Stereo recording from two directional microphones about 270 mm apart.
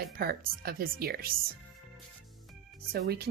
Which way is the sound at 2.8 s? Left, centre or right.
Right.